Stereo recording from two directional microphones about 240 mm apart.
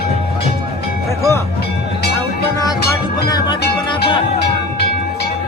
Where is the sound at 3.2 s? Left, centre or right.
Centre.